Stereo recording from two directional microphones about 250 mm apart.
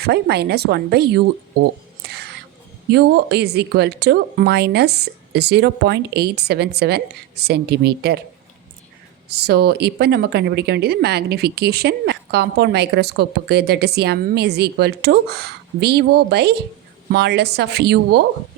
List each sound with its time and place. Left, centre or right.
0.0 s speech: right
2.0 s a sound: right
2.9 s speech: right
9.3 s speech: right